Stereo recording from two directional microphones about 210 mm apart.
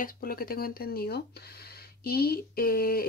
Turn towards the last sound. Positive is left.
turn(degrees=45)  # may be behind; listen again after turning